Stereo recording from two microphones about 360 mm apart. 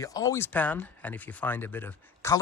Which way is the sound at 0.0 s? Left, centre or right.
Centre.